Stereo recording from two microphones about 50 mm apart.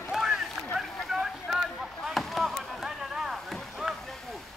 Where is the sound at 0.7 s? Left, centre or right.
Centre.